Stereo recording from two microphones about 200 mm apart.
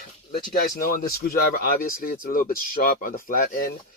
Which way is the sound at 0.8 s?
45° left (ahead or behind).